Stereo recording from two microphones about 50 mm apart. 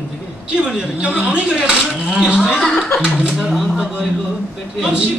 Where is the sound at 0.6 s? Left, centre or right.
Centre.